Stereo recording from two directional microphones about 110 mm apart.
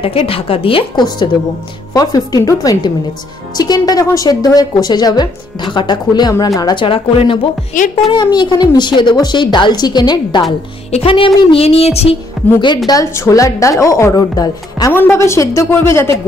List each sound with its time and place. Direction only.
0.0 s a woman's voice: 55° left (ahead or behind)
2.0 s a woman's voice: 35° left (ahead or behind)
6.8 s a woman's voice: 50° left (ahead or behind)
10.9 s a woman's voice: 60° left (ahead or behind)
12.5 s a woman's voice: 40° left (ahead or behind)
13.0 s a woman's voice: 25° left (ahead or behind)
14.9 s a woman's voice: 20° left (ahead or behind)